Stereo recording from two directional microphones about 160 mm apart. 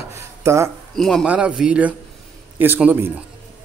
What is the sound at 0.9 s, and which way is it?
A man's voice, centre (ahead or behind).